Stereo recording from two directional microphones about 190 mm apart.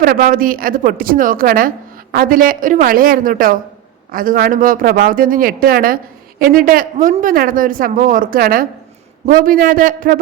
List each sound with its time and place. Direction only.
0.0 s a woman's voice: 45° right (ahead or behind)